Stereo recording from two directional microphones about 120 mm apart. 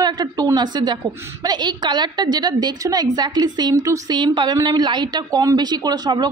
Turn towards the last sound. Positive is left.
turn(degrees=-35)  # may be behind; listen again after turning